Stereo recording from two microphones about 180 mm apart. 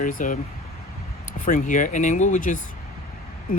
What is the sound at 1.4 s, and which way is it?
Speech, 45° left (ahead or behind).